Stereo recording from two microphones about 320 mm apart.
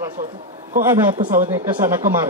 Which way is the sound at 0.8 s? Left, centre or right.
Centre.